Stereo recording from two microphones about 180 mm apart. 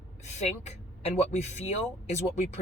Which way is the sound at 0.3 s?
40° left (ahead or behind).